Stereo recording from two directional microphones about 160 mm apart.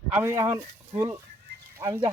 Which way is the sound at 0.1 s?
15° right (ahead or behind).